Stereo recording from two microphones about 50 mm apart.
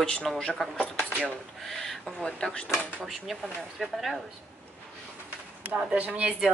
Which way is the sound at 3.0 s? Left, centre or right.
Centre.